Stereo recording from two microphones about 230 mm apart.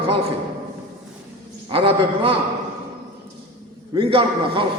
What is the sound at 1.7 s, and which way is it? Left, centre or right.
Speech, right.